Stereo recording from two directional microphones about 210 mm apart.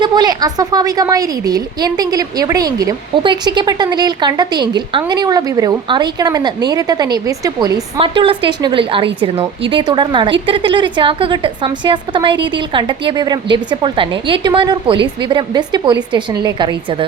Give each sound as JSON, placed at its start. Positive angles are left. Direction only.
{"t": 0.0, "sound": "a woman's voice", "side_deg": -20}